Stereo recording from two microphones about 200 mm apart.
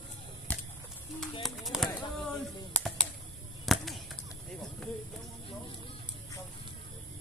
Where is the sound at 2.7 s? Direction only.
5° left (ahead or behind).